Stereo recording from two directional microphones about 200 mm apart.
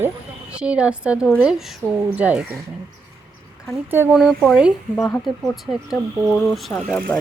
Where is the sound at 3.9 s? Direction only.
10° right (ahead or behind).